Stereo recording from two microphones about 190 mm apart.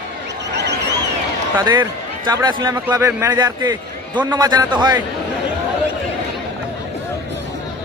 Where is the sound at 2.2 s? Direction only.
20° right (ahead or behind).